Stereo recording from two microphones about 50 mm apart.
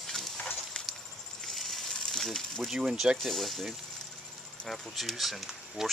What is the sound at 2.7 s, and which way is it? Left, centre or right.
Cutlery, centre.